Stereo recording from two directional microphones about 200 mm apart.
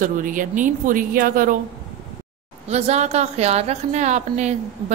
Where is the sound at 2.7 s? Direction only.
35° right (ahead or behind).